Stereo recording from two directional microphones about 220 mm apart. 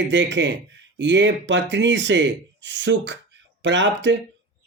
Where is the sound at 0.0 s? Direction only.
55° right (ahead or behind).